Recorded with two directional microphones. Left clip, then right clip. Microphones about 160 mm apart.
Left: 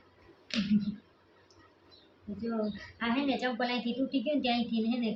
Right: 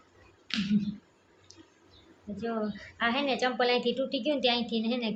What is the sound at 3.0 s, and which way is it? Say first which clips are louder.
A woman's voice: right 4 dB; 60° right (ahead or behind).